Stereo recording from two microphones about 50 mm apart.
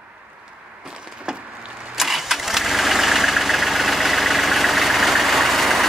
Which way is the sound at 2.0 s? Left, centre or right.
Centre.